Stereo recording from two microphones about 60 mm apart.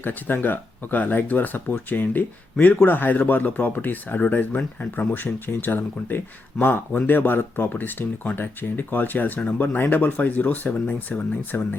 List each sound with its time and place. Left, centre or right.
0.0 s speech: left
11.5 s speech: left